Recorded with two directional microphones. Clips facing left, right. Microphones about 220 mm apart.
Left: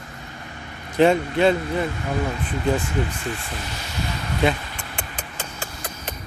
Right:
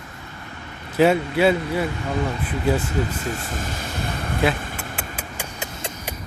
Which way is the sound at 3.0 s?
40° right (ahead or behind).